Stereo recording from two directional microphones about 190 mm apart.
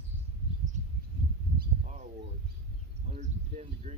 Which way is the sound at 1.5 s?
40° right (ahead or behind).